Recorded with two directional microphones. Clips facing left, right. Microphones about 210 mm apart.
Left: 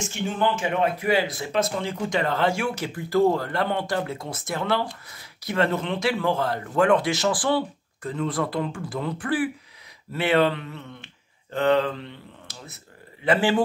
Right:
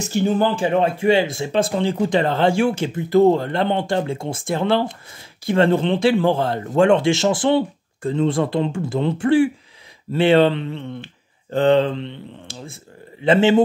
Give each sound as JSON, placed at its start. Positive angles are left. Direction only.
{"t": 0.0, "sound": "speech", "side_deg": -35}